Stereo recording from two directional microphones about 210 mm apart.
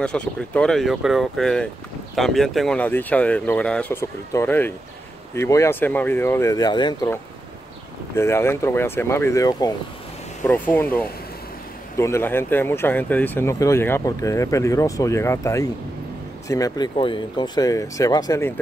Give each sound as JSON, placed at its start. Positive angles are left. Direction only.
{"t": 0.0, "sound": "speech", "side_deg": 5}
{"t": 8.2, "sound": "speech", "side_deg": 10}